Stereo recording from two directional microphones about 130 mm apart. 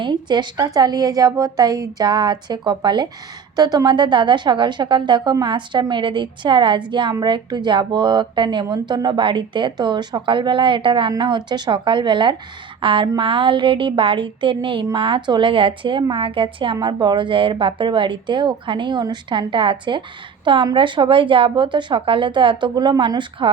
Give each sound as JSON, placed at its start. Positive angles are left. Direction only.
{"t": 0.0, "sound": "speech", "side_deg": -35}